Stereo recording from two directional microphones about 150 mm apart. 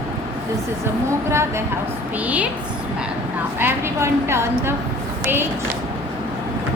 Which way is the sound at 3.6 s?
15° right (ahead or behind).